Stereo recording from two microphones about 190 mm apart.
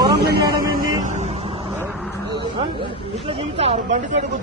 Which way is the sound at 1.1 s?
35° right (ahead or behind).